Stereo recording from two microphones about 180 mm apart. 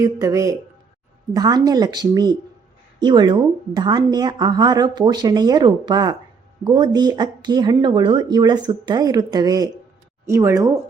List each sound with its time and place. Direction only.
0.0 s a woman's voice: 15° right (ahead or behind)